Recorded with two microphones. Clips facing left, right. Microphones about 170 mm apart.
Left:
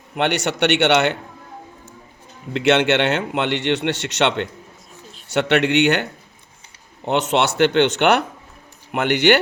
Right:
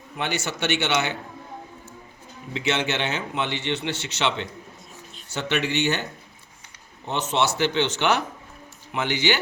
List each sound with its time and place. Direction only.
0.2 s speech: 70° left (ahead or behind)
2.5 s speech: 65° left (ahead or behind)